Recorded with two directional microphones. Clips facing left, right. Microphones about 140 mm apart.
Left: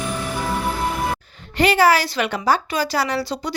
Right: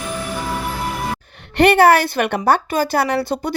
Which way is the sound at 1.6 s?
60° right (ahead or behind).